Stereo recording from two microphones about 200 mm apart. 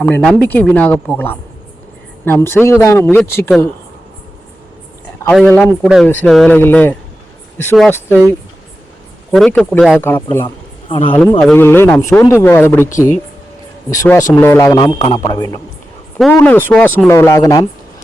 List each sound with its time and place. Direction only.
0.0 s speech: 5° left (ahead or behind)
5.3 s speech: 5° left (ahead or behind)
8.1 s speech: 10° left (ahead or behind)
10.4 s a sound: 25° left (ahead or behind)
11.2 s speech: 10° left (ahead or behind)
13.9 s speech: 15° left (ahead or behind)
16.1 s speech: centre (ahead or behind)